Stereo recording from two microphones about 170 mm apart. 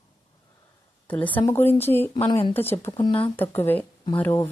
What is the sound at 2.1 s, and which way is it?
Speech, 30° left (ahead or behind).